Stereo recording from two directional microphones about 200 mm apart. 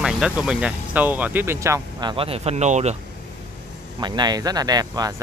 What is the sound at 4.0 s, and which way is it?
Speech, 20° right (ahead or behind).